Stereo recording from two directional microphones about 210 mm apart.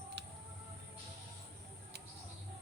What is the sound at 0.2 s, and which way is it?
Music, 55° right (ahead or behind).